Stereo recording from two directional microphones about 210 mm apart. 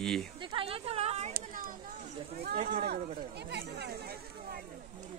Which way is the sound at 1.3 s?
40° right (ahead or behind).